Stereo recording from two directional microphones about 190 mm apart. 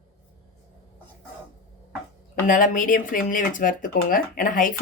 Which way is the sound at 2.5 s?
45° left (ahead or behind).